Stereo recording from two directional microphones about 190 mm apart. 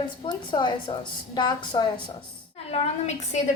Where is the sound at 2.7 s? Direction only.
35° left (ahead or behind).